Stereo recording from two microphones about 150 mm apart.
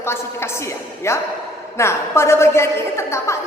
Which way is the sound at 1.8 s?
15° left (ahead or behind).